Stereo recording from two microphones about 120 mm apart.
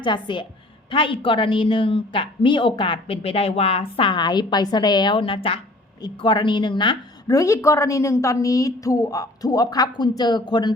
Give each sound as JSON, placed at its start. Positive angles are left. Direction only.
{"t": 0.0, "sound": "a woman's voice", "side_deg": 40}